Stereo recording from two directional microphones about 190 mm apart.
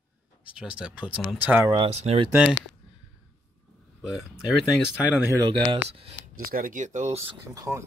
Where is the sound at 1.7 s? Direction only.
30° right (ahead or behind).